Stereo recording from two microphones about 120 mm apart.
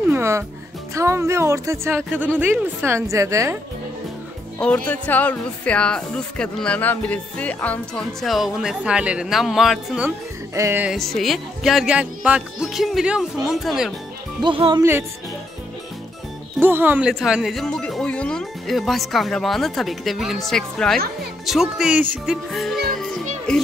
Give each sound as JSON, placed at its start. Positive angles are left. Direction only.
{"t": 0.1, "sound": "music", "side_deg": -20}
{"t": 0.9, "sound": "a woman's voice", "side_deg": -25}
{"t": 4.6, "sound": "speech", "side_deg": 10}
{"t": 10.5, "sound": "music", "side_deg": -25}
{"t": 11.0, "sound": "speech", "side_deg": 0}
{"t": 14.4, "sound": "speech", "side_deg": -45}
{"t": 14.8, "sound": "a woman's voice", "side_deg": -20}
{"t": 16.6, "sound": "speech", "side_deg": -15}
{"t": 17.1, "sound": "speech", "side_deg": 0}
{"t": 21.5, "sound": "music", "side_deg": -5}